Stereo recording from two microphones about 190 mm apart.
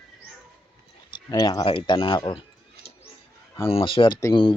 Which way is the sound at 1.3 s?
20° left (ahead or behind).